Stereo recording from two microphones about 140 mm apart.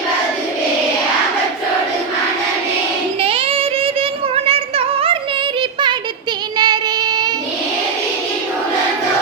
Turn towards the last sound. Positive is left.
turn(degrees=-30)  # may be behind; listen again after turning